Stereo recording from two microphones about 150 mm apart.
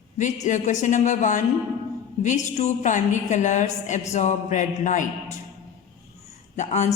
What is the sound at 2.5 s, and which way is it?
A woman's voice, 50° left (ahead or behind).